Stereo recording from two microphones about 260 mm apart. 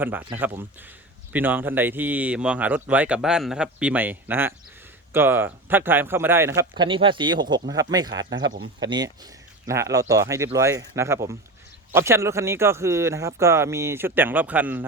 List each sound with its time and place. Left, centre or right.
0.0 s speech: centre